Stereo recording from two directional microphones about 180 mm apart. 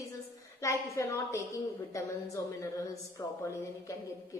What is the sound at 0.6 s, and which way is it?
A woman's voice, 15° left (ahead or behind).